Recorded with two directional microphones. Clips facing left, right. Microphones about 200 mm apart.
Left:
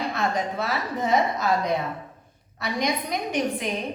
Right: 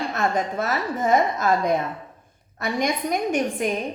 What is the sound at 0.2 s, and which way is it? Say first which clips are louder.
A woman's voice: right 4 dB; 50° right (ahead or behind).